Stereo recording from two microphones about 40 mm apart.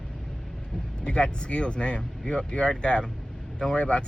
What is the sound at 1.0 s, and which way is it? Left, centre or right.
Speech, left.